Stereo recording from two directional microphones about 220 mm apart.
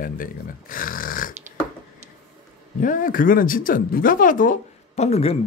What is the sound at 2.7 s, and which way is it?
Speech, 35° left (ahead or behind).